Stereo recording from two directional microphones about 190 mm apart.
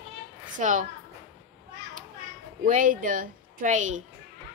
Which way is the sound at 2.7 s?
45° right (ahead or behind).